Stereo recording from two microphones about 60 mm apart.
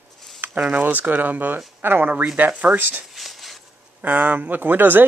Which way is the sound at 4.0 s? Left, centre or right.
Right.